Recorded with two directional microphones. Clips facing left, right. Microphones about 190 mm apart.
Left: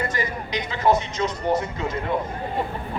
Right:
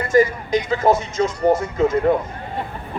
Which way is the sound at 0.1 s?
45° right (ahead or behind).